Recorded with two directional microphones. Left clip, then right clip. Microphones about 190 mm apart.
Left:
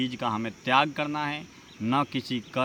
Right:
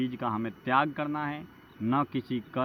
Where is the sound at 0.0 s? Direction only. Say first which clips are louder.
Left 3 dB; 35° left (ahead or behind).